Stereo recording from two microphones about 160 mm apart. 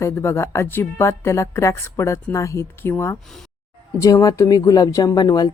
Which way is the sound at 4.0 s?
20° left (ahead or behind).